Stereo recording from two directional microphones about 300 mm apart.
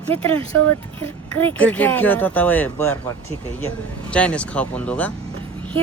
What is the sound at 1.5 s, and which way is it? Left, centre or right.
Speech, centre.